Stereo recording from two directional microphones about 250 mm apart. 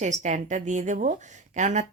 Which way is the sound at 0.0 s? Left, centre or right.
Right.